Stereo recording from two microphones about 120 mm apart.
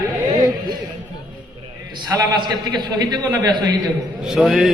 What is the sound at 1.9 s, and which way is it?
A man's voice, 35° right (ahead or behind).